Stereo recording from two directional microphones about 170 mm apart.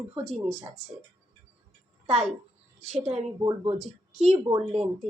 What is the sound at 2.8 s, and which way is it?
Speech, 40° right (ahead or behind).